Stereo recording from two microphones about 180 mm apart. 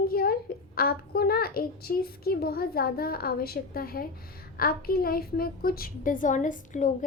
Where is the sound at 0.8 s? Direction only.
60° left (ahead or behind).